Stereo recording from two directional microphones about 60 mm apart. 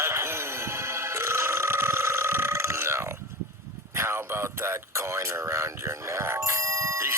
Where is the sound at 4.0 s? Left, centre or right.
Right.